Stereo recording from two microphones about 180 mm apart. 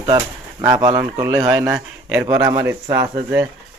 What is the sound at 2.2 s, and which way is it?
A man's voice, 20° right (ahead or behind).